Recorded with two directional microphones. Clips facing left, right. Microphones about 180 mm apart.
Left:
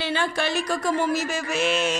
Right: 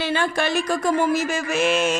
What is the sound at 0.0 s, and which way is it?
A woman's voice, 50° right (ahead or behind).